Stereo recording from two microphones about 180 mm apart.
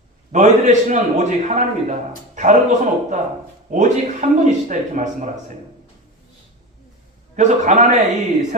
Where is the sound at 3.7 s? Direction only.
40° right (ahead or behind).